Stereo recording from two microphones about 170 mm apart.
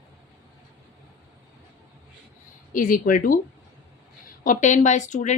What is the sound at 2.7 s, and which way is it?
Speech, 55° left (ahead or behind).